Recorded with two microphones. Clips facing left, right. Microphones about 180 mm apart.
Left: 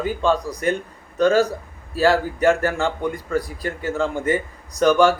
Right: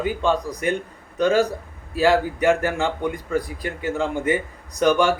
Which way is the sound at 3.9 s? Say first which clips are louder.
Left 1 dB; 15° right (ahead or behind).